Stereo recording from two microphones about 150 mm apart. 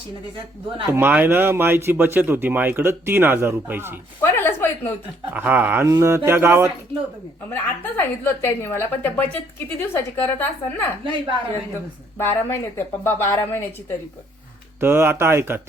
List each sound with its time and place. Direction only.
0.9 s speech: 15° right (ahead or behind)
4.2 s a sound: 15° left (ahead or behind)
5.3 s speech: 10° right (ahead or behind)
7.5 s a woman's voice: 15° left (ahead or behind)
11.0 s a woman's voice: 35° right (ahead or behind)
12.2 s a woman's voice: 15° left (ahead or behind)
14.8 s speech: 15° right (ahead or behind)